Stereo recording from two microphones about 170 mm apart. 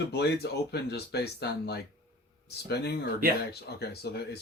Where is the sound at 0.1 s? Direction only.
75° left (ahead or behind).